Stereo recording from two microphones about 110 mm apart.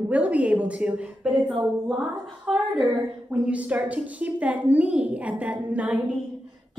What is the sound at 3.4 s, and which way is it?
A woman's voice, 10° right (ahead or behind).